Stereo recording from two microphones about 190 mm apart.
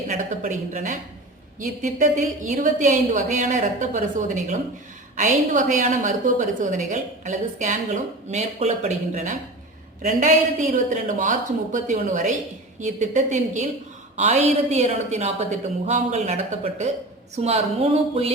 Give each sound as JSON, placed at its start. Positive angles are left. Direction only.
{"t": 0.1, "sound": "a woman's voice", "side_deg": -40}